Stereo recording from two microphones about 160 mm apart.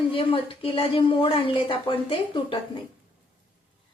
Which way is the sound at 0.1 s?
35° left (ahead or behind).